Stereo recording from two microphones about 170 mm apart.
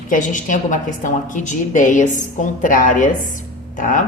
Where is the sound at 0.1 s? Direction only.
50° left (ahead or behind).